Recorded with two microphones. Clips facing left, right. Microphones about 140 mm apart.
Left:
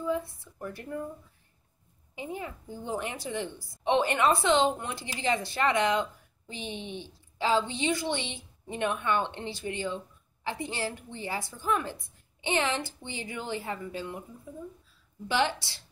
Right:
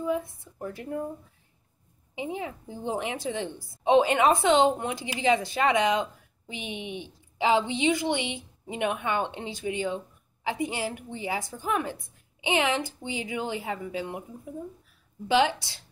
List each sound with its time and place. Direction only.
0.0 s a woman's voice: 15° right (ahead or behind)
2.1 s a woman's voice: 20° right (ahead or behind)